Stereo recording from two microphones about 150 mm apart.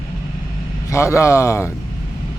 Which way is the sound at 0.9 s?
20° left (ahead or behind).